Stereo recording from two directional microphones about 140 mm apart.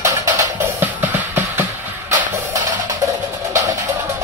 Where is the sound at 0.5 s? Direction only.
15° right (ahead or behind).